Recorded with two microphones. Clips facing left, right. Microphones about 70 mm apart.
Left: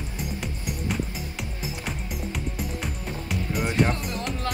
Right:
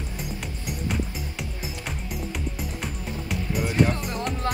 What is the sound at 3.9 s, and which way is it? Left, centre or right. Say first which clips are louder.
Speech: right 1 dB; right.